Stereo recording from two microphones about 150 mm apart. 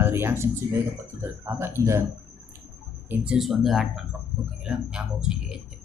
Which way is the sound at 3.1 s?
5° right (ahead or behind).